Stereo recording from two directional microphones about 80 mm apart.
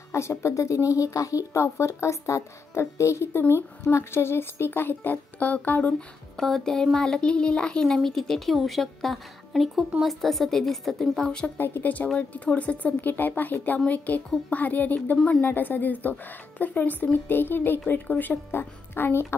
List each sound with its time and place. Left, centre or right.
0.1 s speech: left; by 6.0 s centre
6.3 s speech: centre
11.5 s a woman's voice: left